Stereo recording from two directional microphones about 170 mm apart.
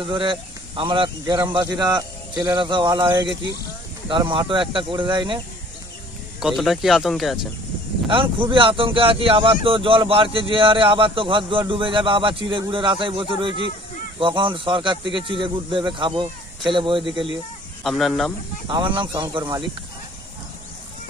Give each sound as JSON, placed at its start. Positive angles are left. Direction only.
{"t": 0.1, "sound": "speech", "side_deg": -30}
{"t": 6.4, "sound": "speech", "side_deg": 0}
{"t": 8.1, "sound": "speech", "side_deg": -30}
{"t": 17.8, "sound": "speech", "side_deg": 0}
{"t": 18.7, "sound": "speech", "side_deg": -30}